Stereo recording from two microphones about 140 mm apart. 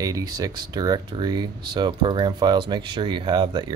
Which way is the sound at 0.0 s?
25° right (ahead or behind).